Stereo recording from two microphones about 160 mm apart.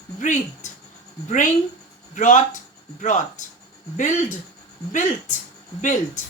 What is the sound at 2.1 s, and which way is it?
Speech, 50° left (ahead or behind).